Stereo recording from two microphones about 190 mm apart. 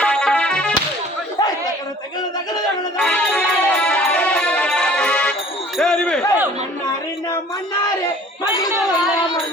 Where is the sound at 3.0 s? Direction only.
5° left (ahead or behind).